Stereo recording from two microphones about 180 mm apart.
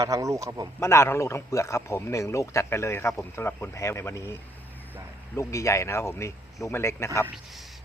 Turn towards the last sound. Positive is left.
turn(degrees=15)  # may be behind; listen again after turning